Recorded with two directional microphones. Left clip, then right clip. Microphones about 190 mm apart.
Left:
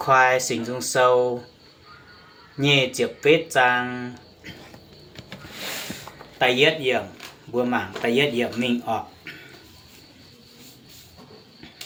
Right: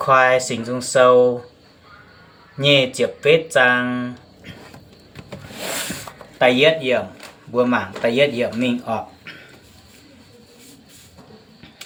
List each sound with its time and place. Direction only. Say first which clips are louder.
0.0 s speech: right 3 dB; 20° left (ahead or behind)
2.6 s speech: right 4 dB; 20° left (ahead or behind)
6.4 s speech: right 4 dB; 25° left (ahead or behind)